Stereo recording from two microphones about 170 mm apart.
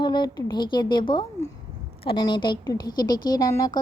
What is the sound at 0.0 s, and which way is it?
Speech, 25° left (ahead or behind).